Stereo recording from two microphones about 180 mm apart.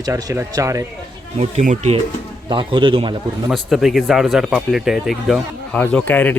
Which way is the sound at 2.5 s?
25° right (ahead or behind).